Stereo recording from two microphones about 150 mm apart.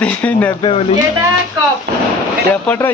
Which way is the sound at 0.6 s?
40° left (ahead or behind).